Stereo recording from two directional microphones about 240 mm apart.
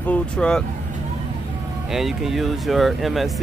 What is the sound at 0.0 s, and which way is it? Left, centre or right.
Speech, centre.